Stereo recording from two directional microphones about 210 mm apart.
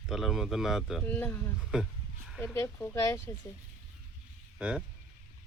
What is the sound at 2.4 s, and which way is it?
Speech, 10° left (ahead or behind).